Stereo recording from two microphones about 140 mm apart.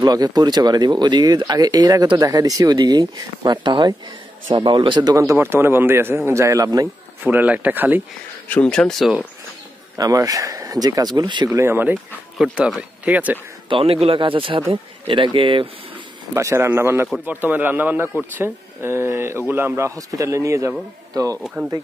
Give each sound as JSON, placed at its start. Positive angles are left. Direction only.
{"t": 0.0, "sound": "speech", "side_deg": -25}
{"t": 7.2, "sound": "speech", "side_deg": -10}
{"t": 8.5, "sound": "speech", "side_deg": 5}
{"t": 9.9, "sound": "speech", "side_deg": -25}
{"t": 13.7, "sound": "speech", "side_deg": -40}
{"t": 16.3, "sound": "speech", "side_deg": -20}